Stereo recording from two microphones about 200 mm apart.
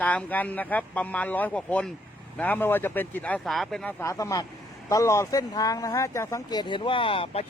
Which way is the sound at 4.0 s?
15° left (ahead or behind).